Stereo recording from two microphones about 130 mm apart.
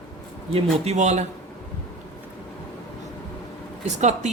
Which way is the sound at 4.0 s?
60° right (ahead or behind).